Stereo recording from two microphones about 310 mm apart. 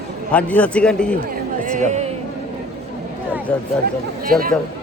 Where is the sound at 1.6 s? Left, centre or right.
Right.